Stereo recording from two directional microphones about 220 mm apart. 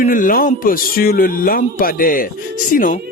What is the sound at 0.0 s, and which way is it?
Speech, 35° left (ahead or behind).